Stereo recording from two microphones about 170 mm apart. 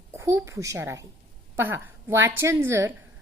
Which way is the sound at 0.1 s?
15° right (ahead or behind).